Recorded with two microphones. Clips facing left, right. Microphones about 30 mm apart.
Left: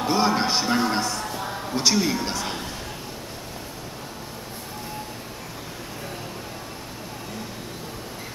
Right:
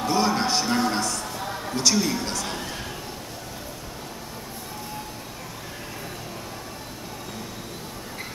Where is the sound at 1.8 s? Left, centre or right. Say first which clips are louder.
Left 1 dB; centre.